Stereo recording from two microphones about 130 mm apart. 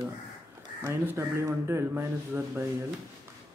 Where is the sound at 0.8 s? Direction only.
20° right (ahead or behind).